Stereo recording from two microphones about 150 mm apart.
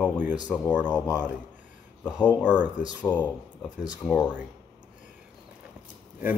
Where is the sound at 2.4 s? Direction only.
10° right (ahead or behind).